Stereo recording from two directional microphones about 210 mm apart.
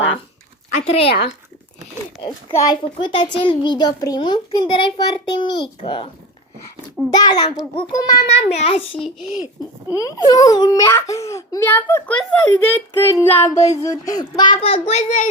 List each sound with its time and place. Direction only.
0.8 s a child's voice: 30° left (ahead or behind)
2.5 s a child's voice: 15° left (ahead or behind)
7.1 s a child's voice: 20° left (ahead or behind)
8.3 s a child's voice: 30° left (ahead or behind)
9.0 s a child's voice: centre (ahead or behind)
9.9 s a child's voice: 15° left (ahead or behind); by 15.3 s 30° left (ahead or behind)